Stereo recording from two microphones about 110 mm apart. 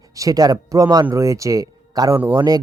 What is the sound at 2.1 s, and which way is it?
Speech, 20° right (ahead or behind).